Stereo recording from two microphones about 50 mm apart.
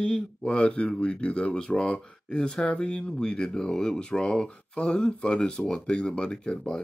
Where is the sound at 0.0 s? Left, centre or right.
Centre.